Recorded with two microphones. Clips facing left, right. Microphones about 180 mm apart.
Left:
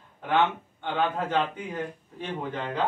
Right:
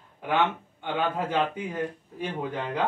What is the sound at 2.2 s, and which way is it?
Speech, 15° right (ahead or behind).